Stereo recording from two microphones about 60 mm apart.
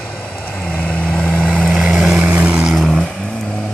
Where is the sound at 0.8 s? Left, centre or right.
Left.